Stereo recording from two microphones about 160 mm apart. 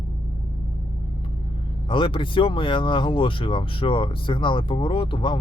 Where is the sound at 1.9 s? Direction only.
30° left (ahead or behind).